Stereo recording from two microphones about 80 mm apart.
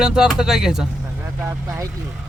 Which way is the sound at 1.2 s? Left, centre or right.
Right.